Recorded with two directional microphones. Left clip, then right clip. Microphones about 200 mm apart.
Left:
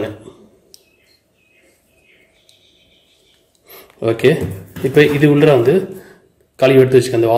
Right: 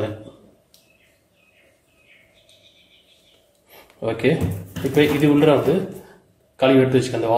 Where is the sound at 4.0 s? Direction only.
45° left (ahead or behind).